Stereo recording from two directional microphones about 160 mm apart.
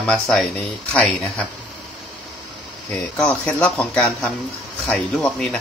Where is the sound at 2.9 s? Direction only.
5° left (ahead or behind).